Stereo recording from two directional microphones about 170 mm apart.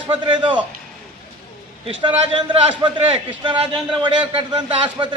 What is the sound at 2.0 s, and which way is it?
A man's voice, 30° right (ahead or behind).